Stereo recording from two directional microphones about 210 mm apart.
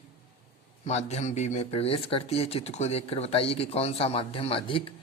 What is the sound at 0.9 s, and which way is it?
Speech, 30° left (ahead or behind).